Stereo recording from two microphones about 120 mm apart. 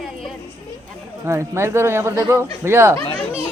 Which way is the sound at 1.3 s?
25° right (ahead or behind).